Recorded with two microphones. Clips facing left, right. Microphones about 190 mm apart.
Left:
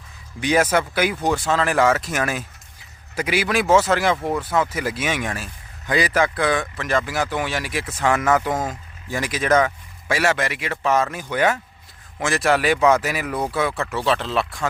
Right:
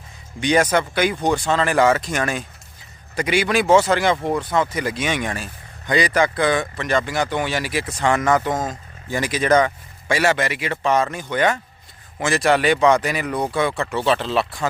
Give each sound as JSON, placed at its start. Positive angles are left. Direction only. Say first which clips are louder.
{"t": 0.3, "sound": "speech", "louder": "right 1 dB", "side_deg": 5}